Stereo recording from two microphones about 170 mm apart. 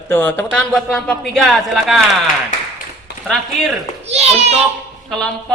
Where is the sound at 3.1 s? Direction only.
80° left.